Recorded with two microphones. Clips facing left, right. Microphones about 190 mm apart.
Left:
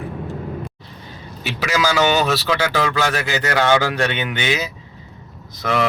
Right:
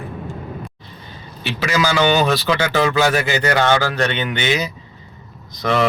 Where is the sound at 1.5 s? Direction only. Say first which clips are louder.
Right 1 dB; 5° left (ahead or behind).